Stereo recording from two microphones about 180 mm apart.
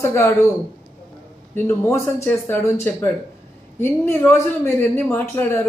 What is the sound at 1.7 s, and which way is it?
Speech, 15° left (ahead or behind).